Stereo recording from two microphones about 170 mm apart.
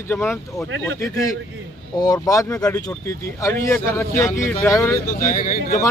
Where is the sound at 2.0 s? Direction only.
20° left (ahead or behind).